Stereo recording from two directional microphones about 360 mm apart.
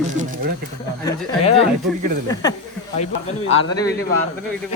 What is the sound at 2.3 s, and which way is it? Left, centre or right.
Speech, centre.